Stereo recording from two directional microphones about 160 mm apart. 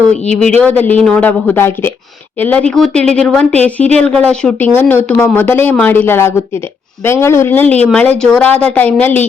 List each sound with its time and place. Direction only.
0.1 s speech: 5° left (ahead or behind)